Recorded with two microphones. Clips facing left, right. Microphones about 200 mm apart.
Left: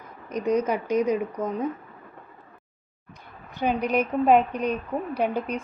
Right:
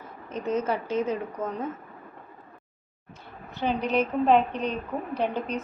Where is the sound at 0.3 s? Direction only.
15° left (ahead or behind).